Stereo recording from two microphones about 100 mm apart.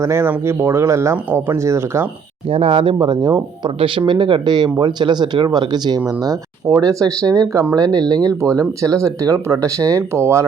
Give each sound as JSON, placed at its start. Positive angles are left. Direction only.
{"t": 0.0, "sound": "speech", "side_deg": -25}
{"t": 2.5, "sound": "speech", "side_deg": -65}
{"t": 3.8, "sound": "speech", "side_deg": -60}
{"t": 6.1, "sound": "speech", "side_deg": -35}